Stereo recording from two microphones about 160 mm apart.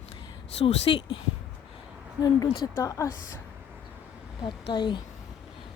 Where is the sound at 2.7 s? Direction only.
20° left (ahead or behind).